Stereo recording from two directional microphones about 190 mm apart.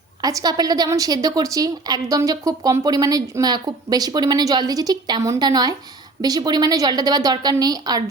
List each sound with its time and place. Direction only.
0.2 s speech: 20° right (ahead or behind)